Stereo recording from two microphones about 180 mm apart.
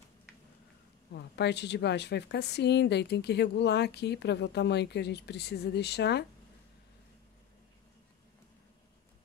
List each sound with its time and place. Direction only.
1.1 s a woman's voice: 70° left (ahead or behind)